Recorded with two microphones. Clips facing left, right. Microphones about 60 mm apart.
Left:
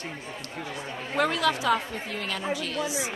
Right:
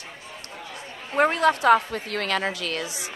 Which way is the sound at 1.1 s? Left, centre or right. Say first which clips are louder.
Right 5 dB; right.